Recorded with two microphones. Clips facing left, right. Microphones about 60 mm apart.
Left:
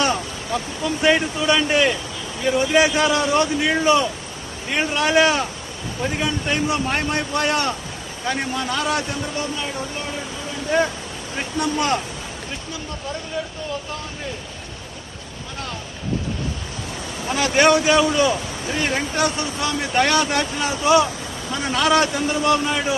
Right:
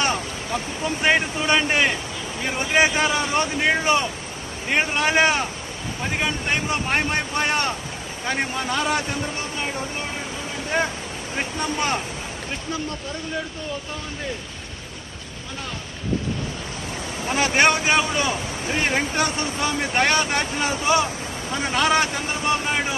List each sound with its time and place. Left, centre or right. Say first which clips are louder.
0.0 s a man's voice: left 2 dB; right
17.2 s a man's voice: left 1 dB; right